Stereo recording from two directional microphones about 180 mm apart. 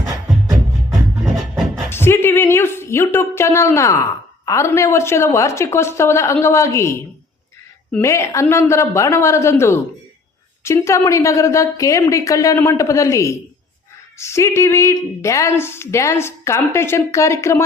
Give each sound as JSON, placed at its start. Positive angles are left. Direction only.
{"t": 1.2, "sound": "music", "side_deg": 0}
{"t": 1.9, "sound": "a sound", "side_deg": 15}
{"t": 4.4, "sound": "a woman's voice", "side_deg": 15}
{"t": 8.0, "sound": "a woman's voice", "side_deg": 15}